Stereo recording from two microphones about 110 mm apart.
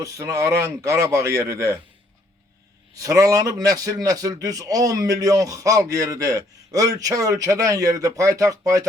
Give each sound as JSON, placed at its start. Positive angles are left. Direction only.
{"t": 0.0, "sound": "a man's voice", "side_deg": -30}
{"t": 3.0, "sound": "a man's voice", "side_deg": -30}